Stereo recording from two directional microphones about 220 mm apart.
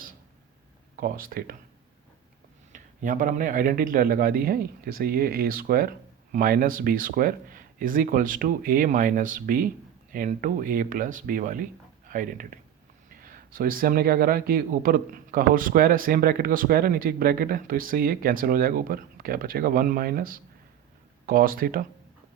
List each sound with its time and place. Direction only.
0.9 s a man's voice: 40° right (ahead or behind)
2.7 s a man's voice: 35° right (ahead or behind)